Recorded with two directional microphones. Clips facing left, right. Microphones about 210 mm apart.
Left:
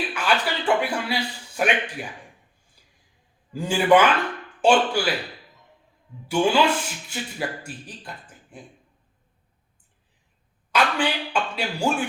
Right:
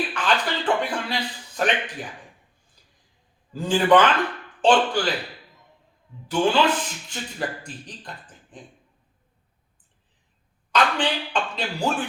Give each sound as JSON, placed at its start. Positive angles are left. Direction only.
{"t": 0.1, "sound": "a man's voice", "side_deg": 10}
{"t": 3.5, "sound": "speech", "side_deg": 10}
{"t": 6.2, "sound": "speech", "side_deg": 10}
{"t": 10.7, "sound": "speech", "side_deg": 10}